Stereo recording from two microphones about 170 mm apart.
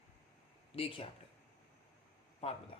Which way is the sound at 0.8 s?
35° left (ahead or behind).